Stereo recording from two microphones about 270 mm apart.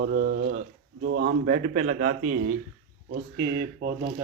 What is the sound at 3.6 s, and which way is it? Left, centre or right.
Speech, right.